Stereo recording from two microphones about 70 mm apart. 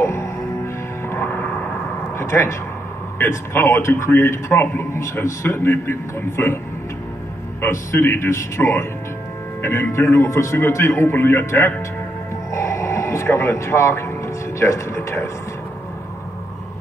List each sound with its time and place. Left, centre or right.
0.0 s music: left
1.0 s music: left
2.1 s a man's voice: left
7.7 s a man's voice: left